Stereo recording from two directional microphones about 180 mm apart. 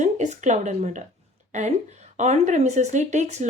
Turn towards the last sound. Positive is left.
turn(degrees=-40)  # may be behind; listen again after turning